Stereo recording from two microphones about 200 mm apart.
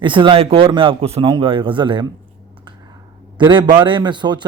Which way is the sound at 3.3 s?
20° right (ahead or behind).